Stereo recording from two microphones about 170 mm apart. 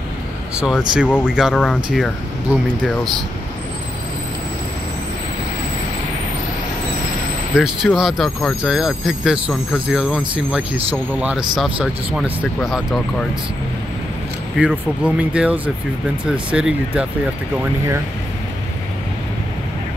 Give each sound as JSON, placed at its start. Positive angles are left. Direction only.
{"t": 0.6, "sound": "speech", "side_deg": -5}
{"t": 7.5, "sound": "speech", "side_deg": -5}
{"t": 14.6, "sound": "speech", "side_deg": -5}